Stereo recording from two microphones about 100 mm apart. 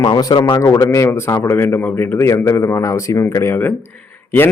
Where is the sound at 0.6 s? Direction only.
30° left (ahead or behind).